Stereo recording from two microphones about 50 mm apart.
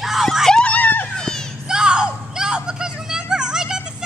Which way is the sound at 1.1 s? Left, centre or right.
Centre.